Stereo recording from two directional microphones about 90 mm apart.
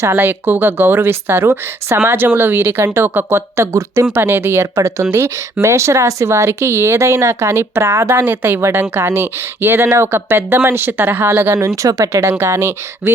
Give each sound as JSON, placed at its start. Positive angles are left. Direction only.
{"t": 0.0, "sound": "speech", "side_deg": -25}